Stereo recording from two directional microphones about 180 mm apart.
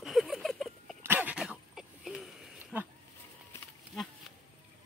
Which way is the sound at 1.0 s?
10° right (ahead or behind).